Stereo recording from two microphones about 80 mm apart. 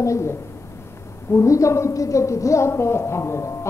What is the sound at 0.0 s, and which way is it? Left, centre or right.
A woman's voice, left.